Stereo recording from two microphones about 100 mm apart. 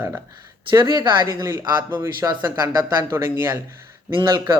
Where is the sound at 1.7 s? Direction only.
20° right (ahead or behind).